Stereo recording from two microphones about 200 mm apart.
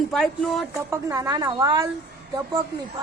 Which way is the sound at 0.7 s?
15° right (ahead or behind).